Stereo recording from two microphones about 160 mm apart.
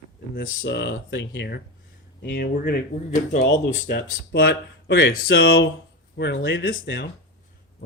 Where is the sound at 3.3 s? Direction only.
50° left (ahead or behind).